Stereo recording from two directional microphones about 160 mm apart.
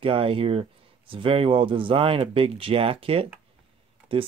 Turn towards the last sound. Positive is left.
turn(degrees=-35)  # may be behind; listen again after turning